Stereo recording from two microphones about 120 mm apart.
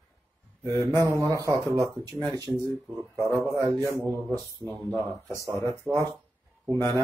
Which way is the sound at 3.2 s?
25° right (ahead or behind).